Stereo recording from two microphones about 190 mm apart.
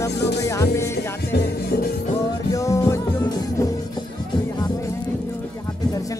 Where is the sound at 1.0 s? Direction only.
60° left (ahead or behind).